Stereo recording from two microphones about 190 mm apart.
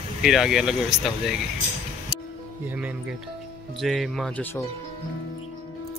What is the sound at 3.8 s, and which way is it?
Speech, centre (ahead or behind).